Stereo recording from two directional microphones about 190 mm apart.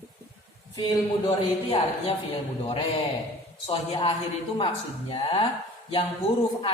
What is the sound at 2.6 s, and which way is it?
Speech, 25° left (ahead or behind).